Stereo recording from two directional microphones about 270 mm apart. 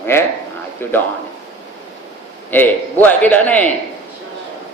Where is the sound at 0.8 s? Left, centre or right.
Centre.